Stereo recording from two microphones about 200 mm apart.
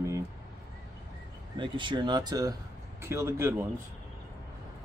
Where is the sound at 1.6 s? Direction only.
25° right (ahead or behind).